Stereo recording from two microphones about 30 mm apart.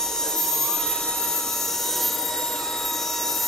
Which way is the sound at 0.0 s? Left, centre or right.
Centre.